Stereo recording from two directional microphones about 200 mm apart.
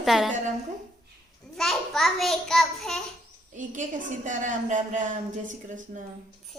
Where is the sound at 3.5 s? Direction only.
40° right (ahead or behind).